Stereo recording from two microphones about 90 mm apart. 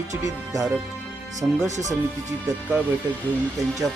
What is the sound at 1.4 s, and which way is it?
Speech, 10° right (ahead or behind).